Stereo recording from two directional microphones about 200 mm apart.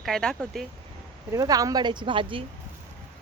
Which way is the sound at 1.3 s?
15° right (ahead or behind).